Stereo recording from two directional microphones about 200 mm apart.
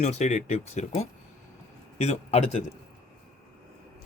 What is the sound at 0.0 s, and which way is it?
Speech, 35° left (ahead or behind).